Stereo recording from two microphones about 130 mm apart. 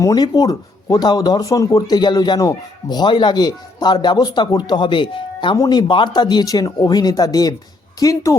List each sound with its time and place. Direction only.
0.0 s speech: 30° left (ahead or behind)